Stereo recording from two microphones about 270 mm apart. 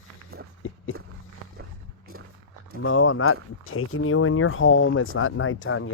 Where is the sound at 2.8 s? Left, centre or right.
Left.